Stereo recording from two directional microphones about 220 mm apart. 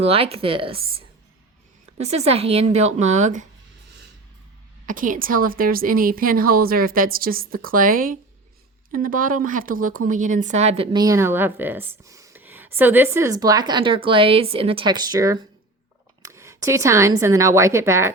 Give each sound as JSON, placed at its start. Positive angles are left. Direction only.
{"t": 0.0, "sound": "speech", "side_deg": -25}
{"t": 4.9, "sound": "a woman's voice", "side_deg": -40}